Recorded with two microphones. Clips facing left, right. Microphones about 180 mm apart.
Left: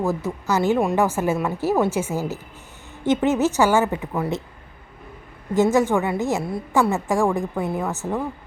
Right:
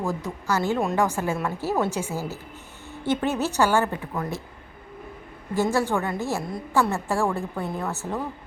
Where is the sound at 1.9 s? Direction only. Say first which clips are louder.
Left 5 dB; 15° right (ahead or behind).